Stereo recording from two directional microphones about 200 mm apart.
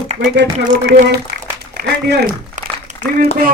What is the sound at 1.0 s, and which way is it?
Speech, 55° right (ahead or behind).